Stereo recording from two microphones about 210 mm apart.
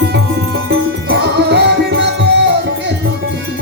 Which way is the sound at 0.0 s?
50° right (ahead or behind).